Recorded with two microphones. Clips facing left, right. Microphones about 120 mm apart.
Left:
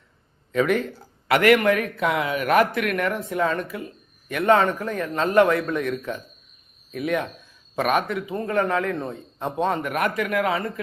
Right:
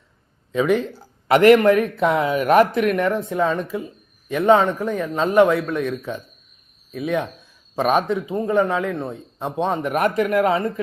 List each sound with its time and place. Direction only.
0.5 s speech: 15° right (ahead or behind)
1.3 s speech: 25° right (ahead or behind)
3.2 s speech: 15° right (ahead or behind)
7.8 s speech: 25° right (ahead or behind)
8.4 s speech: 15° right (ahead or behind)
9.8 s a man's voice: 30° right (ahead or behind)